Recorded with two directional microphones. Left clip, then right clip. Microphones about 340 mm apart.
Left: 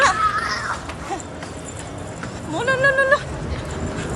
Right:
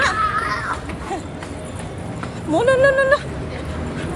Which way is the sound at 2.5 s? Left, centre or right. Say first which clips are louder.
Right 3 dB; centre.